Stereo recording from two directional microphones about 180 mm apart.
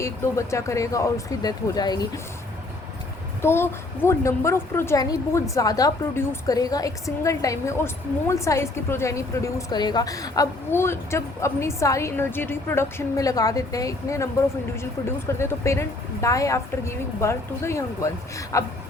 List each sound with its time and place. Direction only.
0.0 s a woman's voice: 15° left (ahead or behind)
3.4 s a woman's voice: 15° left (ahead or behind)